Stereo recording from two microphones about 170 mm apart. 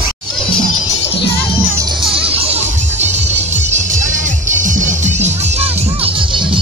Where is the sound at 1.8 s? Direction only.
25° right (ahead or behind).